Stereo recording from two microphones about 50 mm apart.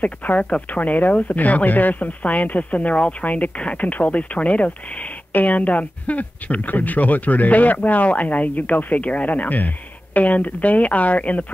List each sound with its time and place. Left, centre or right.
0.0 s speech: left